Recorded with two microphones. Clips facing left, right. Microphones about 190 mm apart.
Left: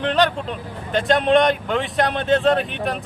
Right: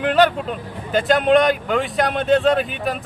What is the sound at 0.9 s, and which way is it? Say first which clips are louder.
Speech: right 2 dB; centre (ahead or behind).